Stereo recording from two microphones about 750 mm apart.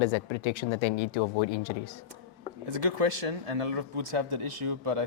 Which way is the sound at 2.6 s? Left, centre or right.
Right.